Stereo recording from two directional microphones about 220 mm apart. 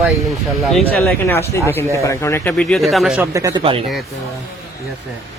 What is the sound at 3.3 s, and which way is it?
Speech, 15° right (ahead or behind).